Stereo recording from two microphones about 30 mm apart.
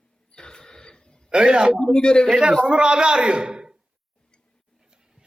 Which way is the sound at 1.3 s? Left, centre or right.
Right.